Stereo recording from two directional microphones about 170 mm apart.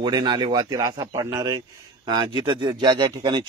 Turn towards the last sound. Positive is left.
turn(degrees=-25)  # may be behind; listen again after turning